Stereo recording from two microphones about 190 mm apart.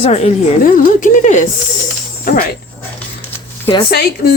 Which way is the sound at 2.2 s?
50° left (ahead or behind).